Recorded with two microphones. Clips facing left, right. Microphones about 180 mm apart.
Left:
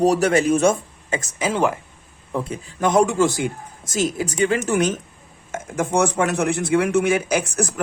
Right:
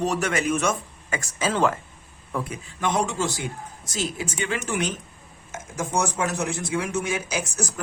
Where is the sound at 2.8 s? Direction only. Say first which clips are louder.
Left 8 dB; 45° left (ahead or behind).